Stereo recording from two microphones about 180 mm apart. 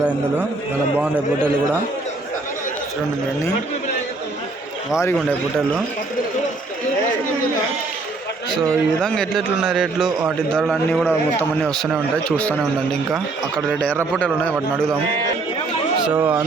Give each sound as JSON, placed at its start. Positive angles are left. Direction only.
{"t": 0.0, "sound": "a man's voice", "side_deg": -10}
{"t": 8.4, "sound": "a man's voice", "side_deg": -25}
{"t": 9.0, "sound": "a man's voice", "side_deg": 5}
{"t": 16.0, "sound": "a man's voice", "side_deg": -10}